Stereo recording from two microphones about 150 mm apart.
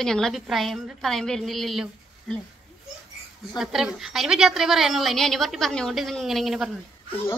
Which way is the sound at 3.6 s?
5° right (ahead or behind).